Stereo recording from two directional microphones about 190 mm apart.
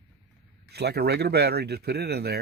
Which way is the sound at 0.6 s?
60° right (ahead or behind).